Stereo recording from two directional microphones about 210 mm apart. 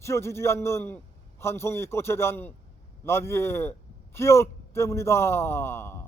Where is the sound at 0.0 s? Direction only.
15° left (ahead or behind).